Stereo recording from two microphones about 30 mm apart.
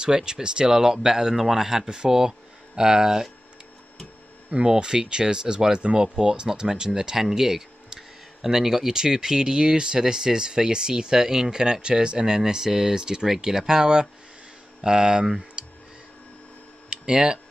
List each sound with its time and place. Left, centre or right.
0.0 s speech: right
0.7 s speech: centre
4.6 s speech: right
16.9 s a sound: right